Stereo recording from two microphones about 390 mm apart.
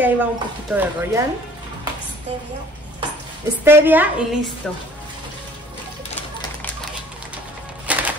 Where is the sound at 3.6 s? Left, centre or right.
Centre.